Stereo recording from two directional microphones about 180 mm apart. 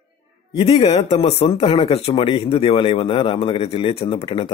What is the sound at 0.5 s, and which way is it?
Speech, 30° left (ahead or behind).